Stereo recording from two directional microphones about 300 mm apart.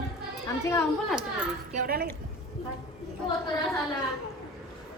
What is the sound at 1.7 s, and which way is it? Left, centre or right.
Speech, right.